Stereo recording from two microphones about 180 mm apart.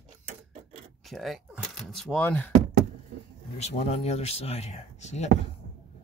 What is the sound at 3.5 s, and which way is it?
Speech, 35° left (ahead or behind).